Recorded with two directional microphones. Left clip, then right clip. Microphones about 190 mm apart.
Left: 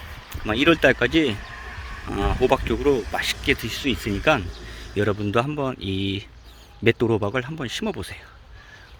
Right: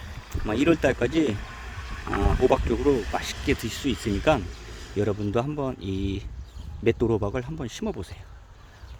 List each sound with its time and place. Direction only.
0.3 s speech: 10° right (ahead or behind)
3.6 s speech: 20° right (ahead or behind); by 8.2 s centre (ahead or behind)